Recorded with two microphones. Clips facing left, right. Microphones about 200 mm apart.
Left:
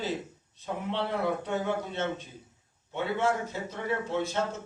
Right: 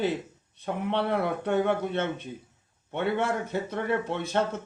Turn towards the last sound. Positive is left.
turn(degrees=-60)  # may be behind; listen again after turning